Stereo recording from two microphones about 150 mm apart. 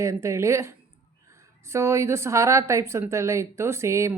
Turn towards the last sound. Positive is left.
turn(degrees=-20)  # may be behind; listen again after turning